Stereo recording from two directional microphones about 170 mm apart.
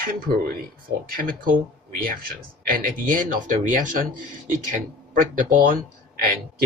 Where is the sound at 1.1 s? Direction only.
60° right (ahead or behind).